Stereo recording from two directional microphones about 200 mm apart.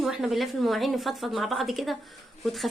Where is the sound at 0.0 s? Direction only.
Centre (ahead or behind).